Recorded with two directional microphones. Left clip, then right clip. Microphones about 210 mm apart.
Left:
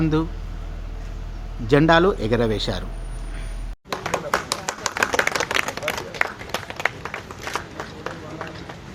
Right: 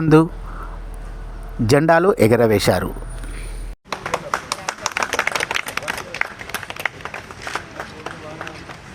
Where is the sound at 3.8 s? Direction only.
25° right (ahead or behind).